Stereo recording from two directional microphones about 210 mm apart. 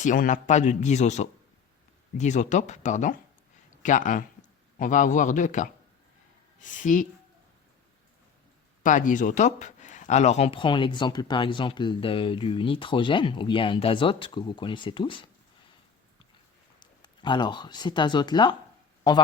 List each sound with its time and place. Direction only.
0.0 s a man's voice: 40° left (ahead or behind)
8.8 s speech: 40° left (ahead or behind)
16.8 s speech: 20° left (ahead or behind)